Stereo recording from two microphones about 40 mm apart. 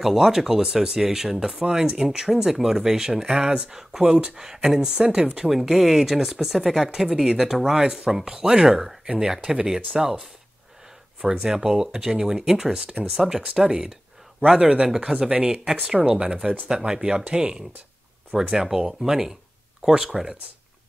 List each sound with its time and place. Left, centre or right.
0.0 s speech: centre
4.0 s speech: right
4.6 s speech: centre
5.5 s speech: centre
7.7 s speech: centre
12.8 s speech: right
13.1 s speech: centre
14.4 s speech: right; by 20.3 s centre